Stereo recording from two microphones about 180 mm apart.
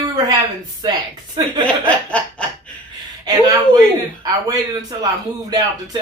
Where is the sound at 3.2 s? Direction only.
20° right (ahead or behind).